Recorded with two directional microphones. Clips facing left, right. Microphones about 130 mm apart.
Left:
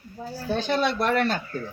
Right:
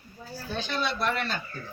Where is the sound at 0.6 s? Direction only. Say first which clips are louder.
Left 5 dB; 50° left (ahead or behind).